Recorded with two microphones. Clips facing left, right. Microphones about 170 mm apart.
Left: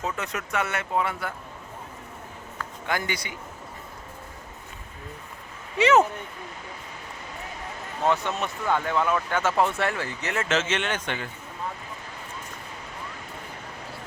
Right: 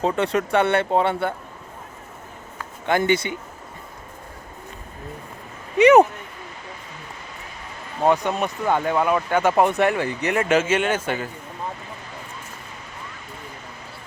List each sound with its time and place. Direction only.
0.2 s speech: 30° right (ahead or behind)
2.8 s speech: 25° right (ahead or behind)
5.7 s a sound: 15° right (ahead or behind)
8.1 s speech: 15° right (ahead or behind)